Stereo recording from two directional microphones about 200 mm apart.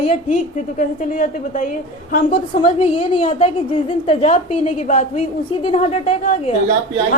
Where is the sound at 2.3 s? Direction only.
30° left (ahead or behind).